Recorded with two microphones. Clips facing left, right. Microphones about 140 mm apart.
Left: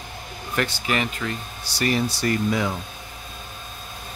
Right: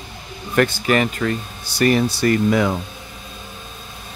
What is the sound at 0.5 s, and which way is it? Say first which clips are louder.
Speech: right 8 dB; 50° right (ahead or behind).